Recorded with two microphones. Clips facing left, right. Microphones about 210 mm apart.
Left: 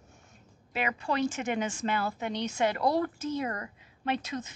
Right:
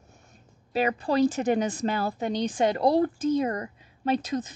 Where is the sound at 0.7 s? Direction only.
35° right (ahead or behind).